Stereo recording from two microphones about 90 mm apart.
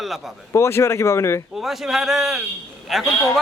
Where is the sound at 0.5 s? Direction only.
30° left (ahead or behind).